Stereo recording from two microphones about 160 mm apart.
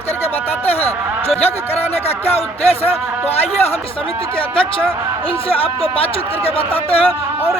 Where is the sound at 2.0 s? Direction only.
40° left (ahead or behind).